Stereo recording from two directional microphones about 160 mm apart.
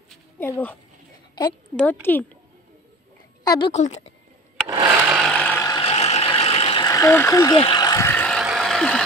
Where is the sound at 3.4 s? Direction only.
25° left (ahead or behind).